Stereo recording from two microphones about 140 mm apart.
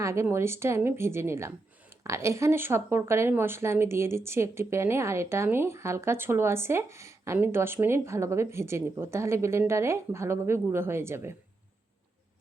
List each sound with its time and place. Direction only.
0.0 s speech: 20° right (ahead or behind)